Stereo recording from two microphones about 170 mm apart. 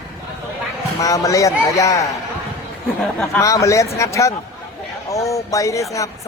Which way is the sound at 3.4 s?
20° left (ahead or behind).